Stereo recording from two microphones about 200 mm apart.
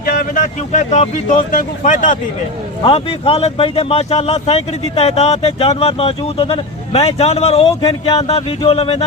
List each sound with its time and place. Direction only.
0.0 s speech: 45° left (ahead or behind)
2.8 s speech: 25° left (ahead or behind)